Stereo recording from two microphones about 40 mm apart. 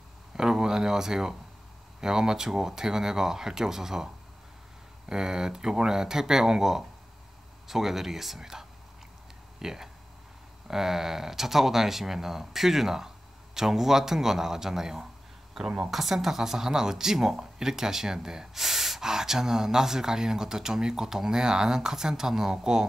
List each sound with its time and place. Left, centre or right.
0.4 s speech: centre